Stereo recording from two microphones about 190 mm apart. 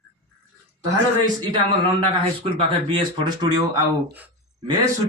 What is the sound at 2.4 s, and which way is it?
Speech, 30° right (ahead or behind).